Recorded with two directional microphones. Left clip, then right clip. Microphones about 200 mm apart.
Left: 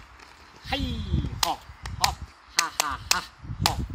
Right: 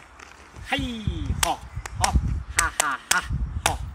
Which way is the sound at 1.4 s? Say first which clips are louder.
Right 2 dB; centre (ahead or behind).